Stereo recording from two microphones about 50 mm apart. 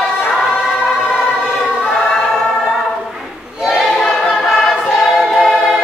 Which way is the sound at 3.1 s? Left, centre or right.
Centre.